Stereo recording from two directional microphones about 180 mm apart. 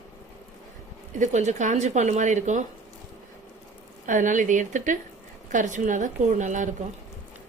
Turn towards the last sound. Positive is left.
turn(degrees=-45)  # may be behind; listen again after turning